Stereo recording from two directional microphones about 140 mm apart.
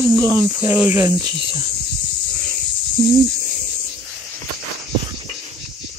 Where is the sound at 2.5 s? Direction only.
70° right (ahead or behind).